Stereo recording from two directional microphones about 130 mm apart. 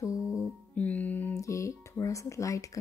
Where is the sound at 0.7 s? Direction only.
10° left (ahead or behind).